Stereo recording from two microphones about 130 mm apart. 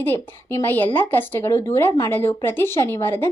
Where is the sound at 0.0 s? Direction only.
15° left (ahead or behind).